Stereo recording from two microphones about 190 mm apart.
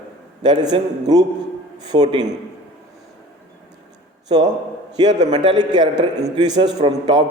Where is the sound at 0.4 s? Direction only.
20° right (ahead or behind).